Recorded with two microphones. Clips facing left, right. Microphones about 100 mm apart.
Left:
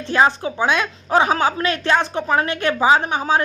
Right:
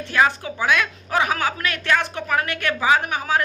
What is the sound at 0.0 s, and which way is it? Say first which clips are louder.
A woman's voice: left 3 dB; 25° left (ahead or behind).